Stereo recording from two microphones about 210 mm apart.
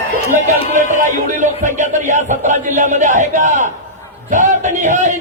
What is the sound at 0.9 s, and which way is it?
A man's voice, 35° right (ahead or behind).